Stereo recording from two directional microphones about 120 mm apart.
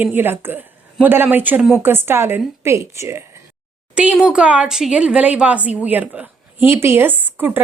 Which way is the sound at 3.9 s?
10° right (ahead or behind).